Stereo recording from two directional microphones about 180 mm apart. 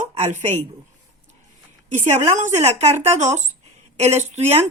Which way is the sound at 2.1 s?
40° right (ahead or behind).